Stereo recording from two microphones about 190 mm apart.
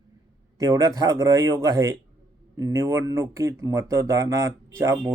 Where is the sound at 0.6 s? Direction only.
20° right (ahead or behind).